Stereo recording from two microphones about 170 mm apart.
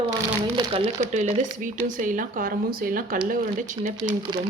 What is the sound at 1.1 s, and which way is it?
Speech, 45° right (ahead or behind).